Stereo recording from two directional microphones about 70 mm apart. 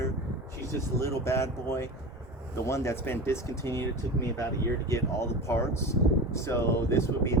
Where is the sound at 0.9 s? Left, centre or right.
Left.